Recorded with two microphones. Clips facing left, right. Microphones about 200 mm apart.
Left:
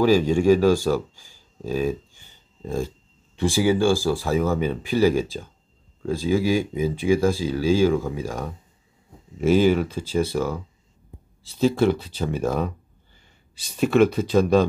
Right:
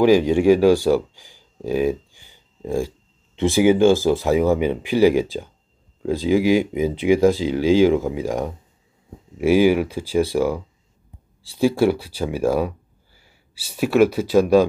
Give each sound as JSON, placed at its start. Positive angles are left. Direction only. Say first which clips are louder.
{"t": 0.0, "sound": "speech", "louder": "right 3 dB", "side_deg": -15}